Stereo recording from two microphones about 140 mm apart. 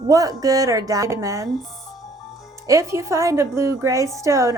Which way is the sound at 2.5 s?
20° right (ahead or behind).